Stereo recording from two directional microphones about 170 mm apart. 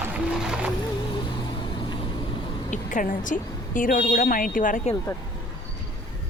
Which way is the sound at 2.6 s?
50° left (ahead or behind).